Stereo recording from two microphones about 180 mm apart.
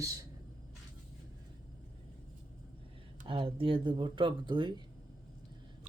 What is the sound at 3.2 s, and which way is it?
Speech, 30° right (ahead or behind).